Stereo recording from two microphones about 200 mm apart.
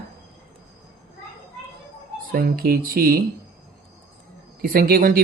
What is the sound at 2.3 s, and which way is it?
Speech, 45° right (ahead or behind).